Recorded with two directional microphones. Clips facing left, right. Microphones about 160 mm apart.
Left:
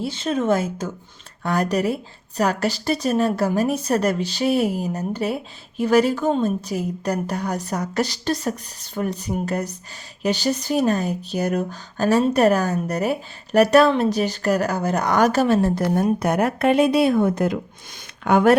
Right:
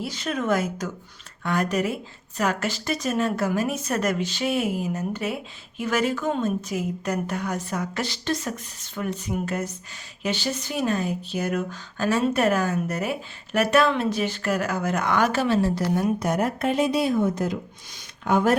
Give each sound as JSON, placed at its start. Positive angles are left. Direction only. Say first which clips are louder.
{"t": 0.0, "sound": "a woman's voice", "louder": "left 5 dB", "side_deg": 30}
{"t": 16.2, "sound": "speech", "louder": "left 5 dB", "side_deg": 65}